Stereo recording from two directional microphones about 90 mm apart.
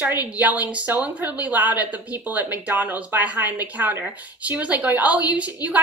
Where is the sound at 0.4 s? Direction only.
15° right (ahead or behind).